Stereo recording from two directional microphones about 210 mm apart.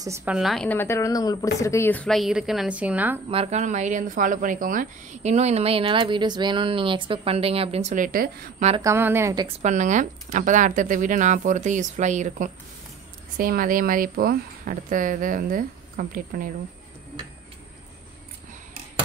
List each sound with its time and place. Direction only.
0.0 s a woman's voice: 10° right (ahead or behind)
3.3 s speech: 30° right (ahead or behind)
8.8 s a woman's voice: 10° right (ahead or behind)
9.6 s speech: 35° right (ahead or behind)